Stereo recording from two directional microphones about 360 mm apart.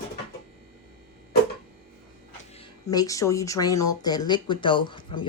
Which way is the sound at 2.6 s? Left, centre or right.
Centre.